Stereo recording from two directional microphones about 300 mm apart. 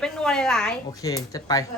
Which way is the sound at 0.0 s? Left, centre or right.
Centre.